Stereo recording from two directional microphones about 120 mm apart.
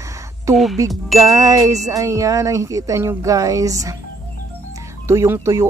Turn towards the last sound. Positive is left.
turn(degrees=-25)  # may be behind; listen again after turning